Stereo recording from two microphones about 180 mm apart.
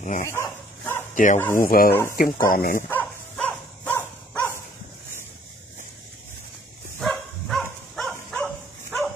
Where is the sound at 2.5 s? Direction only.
50° left (ahead or behind).